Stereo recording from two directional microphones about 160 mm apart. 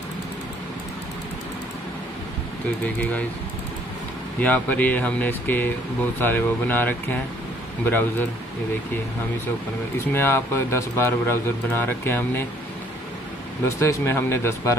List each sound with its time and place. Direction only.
4.4 s a man's voice: 10° left (ahead or behind)
10.1 s a man's voice: 15° left (ahead or behind)
13.7 s a man's voice: 20° left (ahead or behind)